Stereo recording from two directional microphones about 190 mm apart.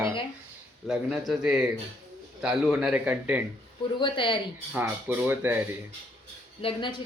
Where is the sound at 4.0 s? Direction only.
25° left (ahead or behind).